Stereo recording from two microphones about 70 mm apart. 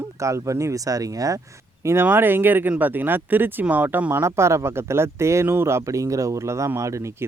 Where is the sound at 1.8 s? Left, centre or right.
Right.